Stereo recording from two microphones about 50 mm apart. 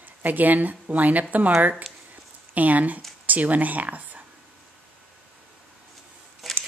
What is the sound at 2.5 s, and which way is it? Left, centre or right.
Speech, right.